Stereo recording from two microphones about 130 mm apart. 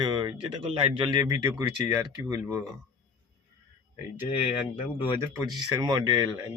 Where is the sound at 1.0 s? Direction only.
30° right (ahead or behind).